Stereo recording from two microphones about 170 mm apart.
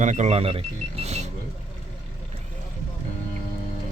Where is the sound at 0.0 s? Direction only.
45° right (ahead or behind).